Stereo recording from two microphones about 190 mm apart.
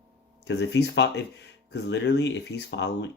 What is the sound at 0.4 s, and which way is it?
Speech, 65° left (ahead or behind).